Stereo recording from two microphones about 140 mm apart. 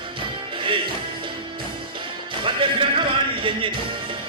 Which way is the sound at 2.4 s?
35° right (ahead or behind).